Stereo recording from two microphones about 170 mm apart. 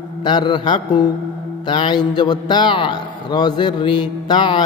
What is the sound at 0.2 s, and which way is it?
A man's voice, 30° left (ahead or behind).